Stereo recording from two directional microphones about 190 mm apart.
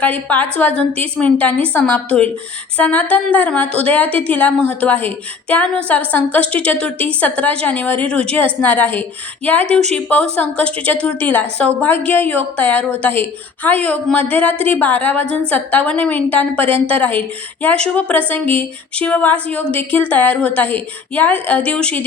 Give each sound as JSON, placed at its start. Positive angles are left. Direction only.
{"t": 0.0, "sound": "a woman's voice", "side_deg": 10}
{"t": 16.6, "sound": "a woman's voice", "side_deg": -30}
{"t": 16.9, "sound": "a woman's voice", "side_deg": 10}